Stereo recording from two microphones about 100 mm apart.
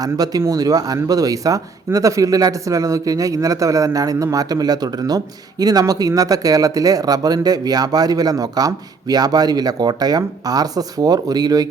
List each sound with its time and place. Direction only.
0.0 s speech: 40° right (ahead or behind)